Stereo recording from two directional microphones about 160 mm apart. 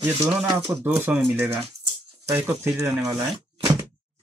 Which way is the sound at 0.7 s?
15° right (ahead or behind).